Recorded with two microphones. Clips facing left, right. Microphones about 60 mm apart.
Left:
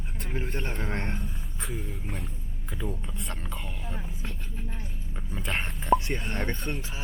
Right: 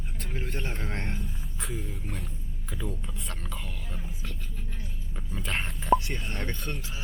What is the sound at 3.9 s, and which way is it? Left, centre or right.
Speech, left.